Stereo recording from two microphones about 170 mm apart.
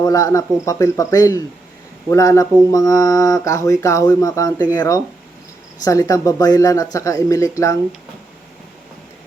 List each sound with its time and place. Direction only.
0.0 s speech: 20° left (ahead or behind)